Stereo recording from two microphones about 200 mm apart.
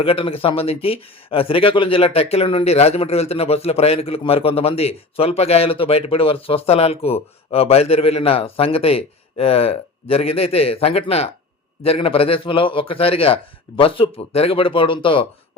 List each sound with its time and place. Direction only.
0.0 s speech: 30° left (ahead or behind)